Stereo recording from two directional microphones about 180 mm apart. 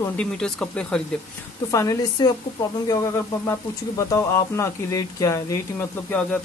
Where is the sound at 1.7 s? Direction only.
20° left (ahead or behind).